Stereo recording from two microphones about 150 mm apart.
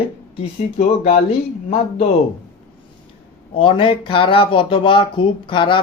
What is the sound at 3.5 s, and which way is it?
Speech, 35° left (ahead or behind).